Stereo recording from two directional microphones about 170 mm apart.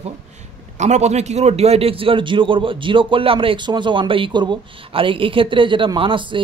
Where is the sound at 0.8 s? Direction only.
40° right (ahead or behind).